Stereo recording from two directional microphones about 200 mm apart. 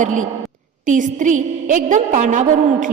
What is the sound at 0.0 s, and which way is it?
A woman's voice, 40° right (ahead or behind).